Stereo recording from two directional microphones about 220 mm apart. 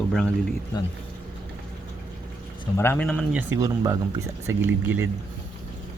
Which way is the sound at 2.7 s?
10° left (ahead or behind).